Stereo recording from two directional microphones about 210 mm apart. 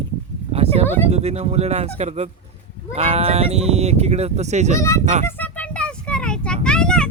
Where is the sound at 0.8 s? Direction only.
10° left (ahead or behind).